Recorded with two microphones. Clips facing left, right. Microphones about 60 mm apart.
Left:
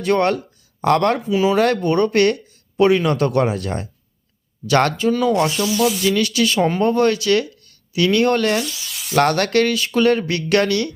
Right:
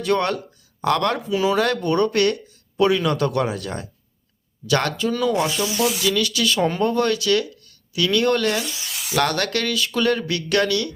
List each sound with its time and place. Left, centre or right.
0.0 s speech: left
1.3 s speech: centre
1.5 s speech: left
5.7 s speech: centre
6.0 s speech: left
8.6 s rub: right
8.9 s a sound: centre
9.1 s speech: left